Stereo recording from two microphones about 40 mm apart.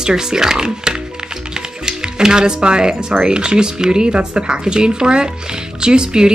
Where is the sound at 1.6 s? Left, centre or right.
Centre.